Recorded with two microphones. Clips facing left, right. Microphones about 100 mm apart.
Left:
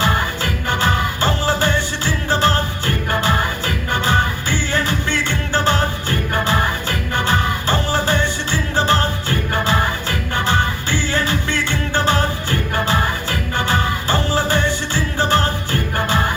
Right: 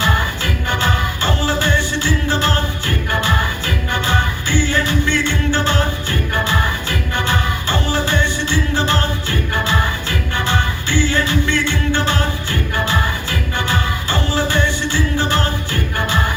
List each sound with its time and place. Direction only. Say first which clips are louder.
0.0 s music: even; 35° left (ahead or behind)